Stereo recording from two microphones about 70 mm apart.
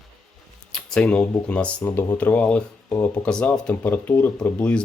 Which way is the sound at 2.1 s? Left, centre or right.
Centre.